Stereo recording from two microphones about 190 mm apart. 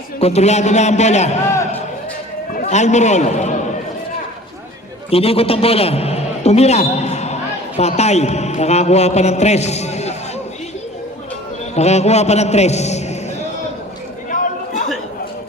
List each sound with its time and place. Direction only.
0.2 s a man's voice: 35° left (ahead or behind)
2.6 s a man's voice: 40° left (ahead or behind)
5.1 s a man's voice: 30° left (ahead or behind)
11.7 s a man's voice: 35° left (ahead or behind)
14.3 s a sound: 40° left (ahead or behind)